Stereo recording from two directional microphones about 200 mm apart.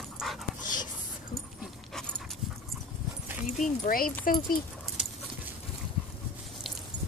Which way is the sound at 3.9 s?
45° left (ahead or behind).